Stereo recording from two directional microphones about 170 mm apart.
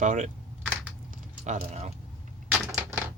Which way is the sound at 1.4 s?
40° right (ahead or behind).